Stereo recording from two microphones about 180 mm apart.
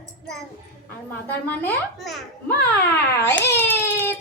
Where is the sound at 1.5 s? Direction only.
5° left (ahead or behind).